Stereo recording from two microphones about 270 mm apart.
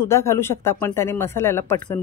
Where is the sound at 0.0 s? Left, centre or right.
Centre.